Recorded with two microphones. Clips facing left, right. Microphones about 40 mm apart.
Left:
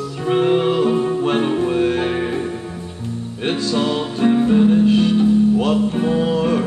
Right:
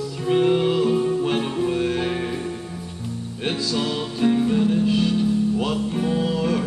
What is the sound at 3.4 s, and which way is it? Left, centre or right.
Music, centre.